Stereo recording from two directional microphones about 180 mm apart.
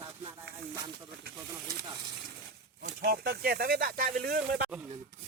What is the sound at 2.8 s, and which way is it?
Speech, 55° right (ahead or behind).